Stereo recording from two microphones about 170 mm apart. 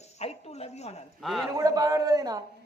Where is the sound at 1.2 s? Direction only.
Centre (ahead or behind).